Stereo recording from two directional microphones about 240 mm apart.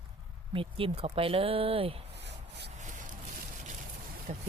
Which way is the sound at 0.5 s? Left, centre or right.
Right.